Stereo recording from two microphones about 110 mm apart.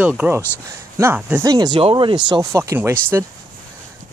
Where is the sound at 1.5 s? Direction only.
40° right (ahead or behind).